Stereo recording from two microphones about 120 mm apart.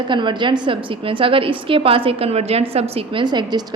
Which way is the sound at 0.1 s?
40° right (ahead or behind).